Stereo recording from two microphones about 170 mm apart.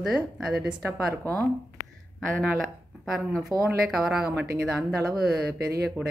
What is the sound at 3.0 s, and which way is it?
Speech, centre (ahead or behind).